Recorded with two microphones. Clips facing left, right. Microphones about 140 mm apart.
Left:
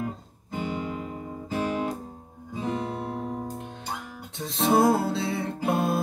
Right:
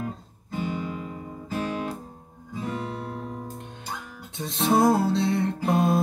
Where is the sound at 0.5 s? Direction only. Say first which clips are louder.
Even; 20° left (ahead or behind).